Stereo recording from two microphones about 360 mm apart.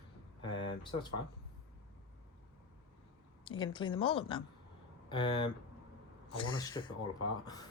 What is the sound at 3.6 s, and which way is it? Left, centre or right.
Speech, centre.